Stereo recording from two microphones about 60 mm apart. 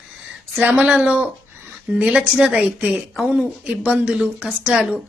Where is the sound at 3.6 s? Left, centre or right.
Right.